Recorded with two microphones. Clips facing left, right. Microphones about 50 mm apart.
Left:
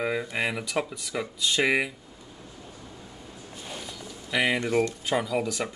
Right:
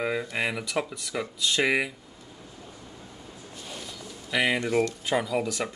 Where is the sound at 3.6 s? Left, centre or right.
Centre.